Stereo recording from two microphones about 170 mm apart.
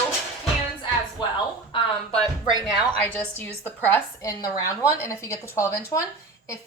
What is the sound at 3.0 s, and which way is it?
Speech, 10° left (ahead or behind).